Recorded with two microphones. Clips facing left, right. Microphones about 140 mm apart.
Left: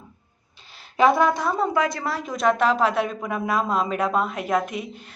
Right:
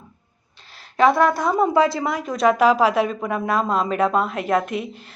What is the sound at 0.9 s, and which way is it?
Speech, centre (ahead or behind).